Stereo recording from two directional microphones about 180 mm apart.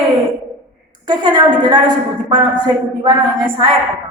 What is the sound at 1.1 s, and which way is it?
A woman's voice, 25° right (ahead or behind).